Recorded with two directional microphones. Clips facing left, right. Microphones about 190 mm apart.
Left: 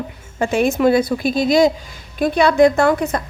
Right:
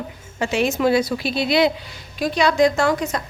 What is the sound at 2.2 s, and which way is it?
A woman's voice, 55° left (ahead or behind).